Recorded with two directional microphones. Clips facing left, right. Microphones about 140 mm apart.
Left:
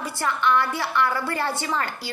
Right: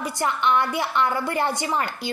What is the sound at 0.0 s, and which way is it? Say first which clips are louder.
A woman's voice: right 1 dB; 20° right (ahead or behind).